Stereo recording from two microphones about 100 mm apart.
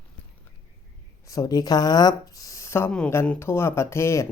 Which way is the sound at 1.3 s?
40° left (ahead or behind).